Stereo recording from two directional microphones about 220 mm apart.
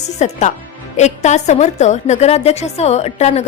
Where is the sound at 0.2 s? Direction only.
35° left (ahead or behind).